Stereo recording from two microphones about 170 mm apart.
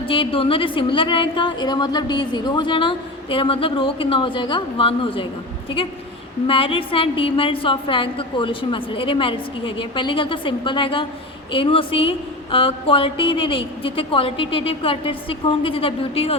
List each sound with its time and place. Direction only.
0.1 s a woman's voice: 30° left (ahead or behind)
6.5 s speech: 30° left (ahead or behind)